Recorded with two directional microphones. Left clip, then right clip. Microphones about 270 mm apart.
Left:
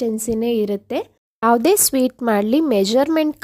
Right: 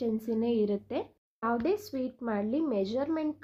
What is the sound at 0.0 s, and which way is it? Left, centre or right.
A woman's voice, left.